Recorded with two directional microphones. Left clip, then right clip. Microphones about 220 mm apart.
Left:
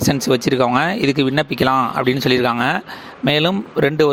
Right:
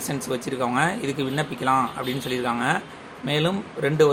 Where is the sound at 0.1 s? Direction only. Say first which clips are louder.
Left 10 dB; 40° left (ahead or behind).